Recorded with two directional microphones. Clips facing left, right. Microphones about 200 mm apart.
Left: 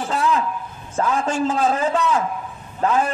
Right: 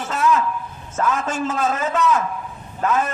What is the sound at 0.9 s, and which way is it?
A man's voice, 30° left (ahead or behind).